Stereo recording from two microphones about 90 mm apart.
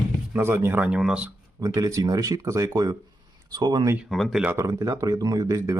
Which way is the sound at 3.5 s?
50° right (ahead or behind).